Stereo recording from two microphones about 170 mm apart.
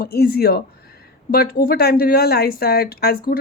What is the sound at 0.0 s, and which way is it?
Speech, 65° left (ahead or behind).